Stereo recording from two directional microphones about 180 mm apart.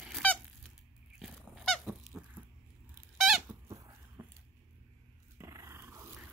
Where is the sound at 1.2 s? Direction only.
Centre (ahead or behind).